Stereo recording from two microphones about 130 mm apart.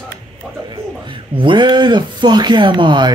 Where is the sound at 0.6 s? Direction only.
40° right (ahead or behind).